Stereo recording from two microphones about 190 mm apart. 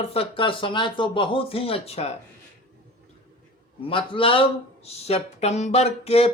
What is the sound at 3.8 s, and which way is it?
Speech, 25° left (ahead or behind).